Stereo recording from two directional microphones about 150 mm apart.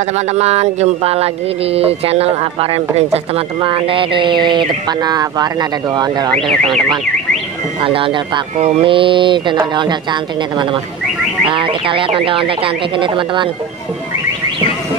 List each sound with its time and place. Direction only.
0.3 s speech: 45° right (ahead or behind); by 6.3 s 30° right (ahead or behind)
7.8 s speech: 35° right (ahead or behind)
11.4 s speech: 35° right (ahead or behind)